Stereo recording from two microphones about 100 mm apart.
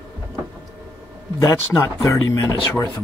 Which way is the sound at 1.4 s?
35° left (ahead or behind).